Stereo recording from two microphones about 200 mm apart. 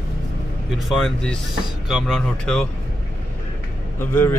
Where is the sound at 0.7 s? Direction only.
5° left (ahead or behind).